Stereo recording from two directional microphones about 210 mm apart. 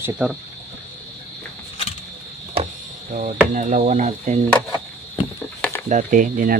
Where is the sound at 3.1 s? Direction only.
35° right (ahead or behind).